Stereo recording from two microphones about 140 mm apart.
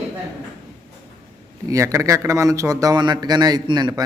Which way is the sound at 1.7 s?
20° right (ahead or behind).